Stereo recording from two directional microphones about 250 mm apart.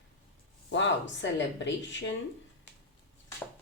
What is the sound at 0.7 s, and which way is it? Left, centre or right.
Speech, left.